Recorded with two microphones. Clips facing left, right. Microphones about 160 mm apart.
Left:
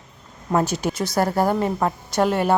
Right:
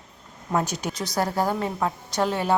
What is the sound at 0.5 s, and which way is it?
A woman's voice, 5° left (ahead or behind).